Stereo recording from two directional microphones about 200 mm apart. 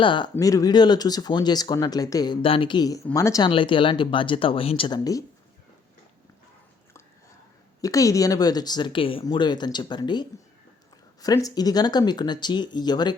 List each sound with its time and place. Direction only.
0.0 s speech: 25° left (ahead or behind)
7.8 s speech: 15° left (ahead or behind)